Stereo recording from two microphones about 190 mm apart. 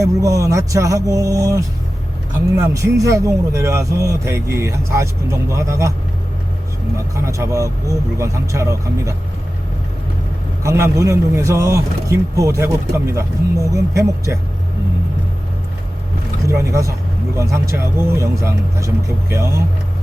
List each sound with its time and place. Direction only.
0.0 s speech: 15° right (ahead or behind)
7.3 s speech: 15° right (ahead or behind)
10.6 s speech: 15° right (ahead or behind)
16.5 s speech: 15° right (ahead or behind)